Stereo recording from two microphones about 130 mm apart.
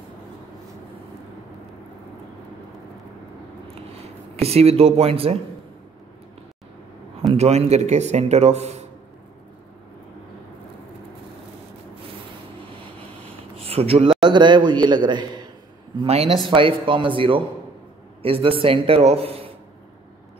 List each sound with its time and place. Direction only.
3.6 s a sound: 50° right (ahead or behind)
7.3 s a man's voice: 55° right (ahead or behind)
13.7 s speech: 50° right (ahead or behind)
14.3 s a man's voice: 35° right (ahead or behind)
16.1 s a man's voice: 50° right (ahead or behind)
16.4 s a man's voice: 40° right (ahead or behind)